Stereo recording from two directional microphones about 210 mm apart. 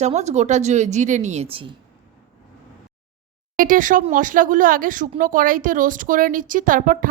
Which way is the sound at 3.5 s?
40° right (ahead or behind).